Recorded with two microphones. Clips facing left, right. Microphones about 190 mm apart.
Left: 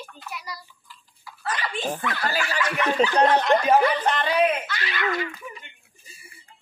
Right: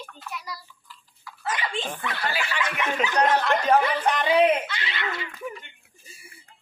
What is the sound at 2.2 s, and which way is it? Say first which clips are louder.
Speech: left 2 dB; 40° left (ahead or behind).